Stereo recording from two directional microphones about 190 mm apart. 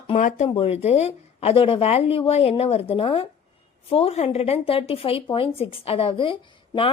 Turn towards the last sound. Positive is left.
turn(degrees=25)  # may be behind; listen again after turning